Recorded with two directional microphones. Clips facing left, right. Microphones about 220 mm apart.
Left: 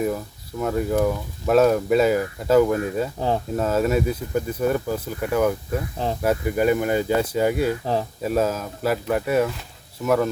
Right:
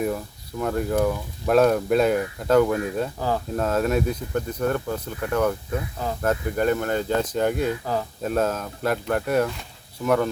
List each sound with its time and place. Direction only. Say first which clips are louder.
0.6 s speech: left 1 dB; centre (ahead or behind)
3.2 s speech: left 2 dB; 25° left (ahead or behind)
3.5 s speech: left 1 dB; 5° left (ahead or behind)